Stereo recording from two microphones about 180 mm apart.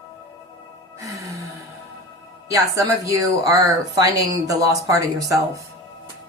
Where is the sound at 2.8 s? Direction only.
20° right (ahead or behind).